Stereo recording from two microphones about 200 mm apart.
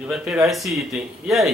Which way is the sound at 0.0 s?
Centre (ahead or behind).